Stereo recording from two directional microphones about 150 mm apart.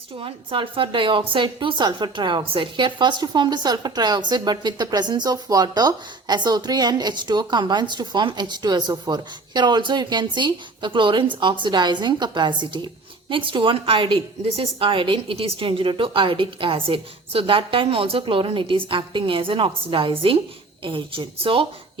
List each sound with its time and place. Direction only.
0.2 s a woman's voice: 35° right (ahead or behind)